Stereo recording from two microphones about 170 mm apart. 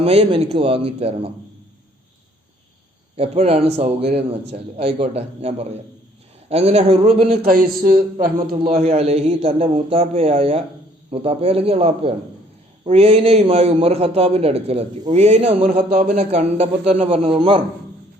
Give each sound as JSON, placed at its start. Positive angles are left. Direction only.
{"t": 0.0, "sound": "a man's voice", "side_deg": -35}
{"t": 3.2, "sound": "a man's voice", "side_deg": -35}
{"t": 7.4, "sound": "speech", "side_deg": -60}
{"t": 8.6, "sound": "a man's voice", "side_deg": -45}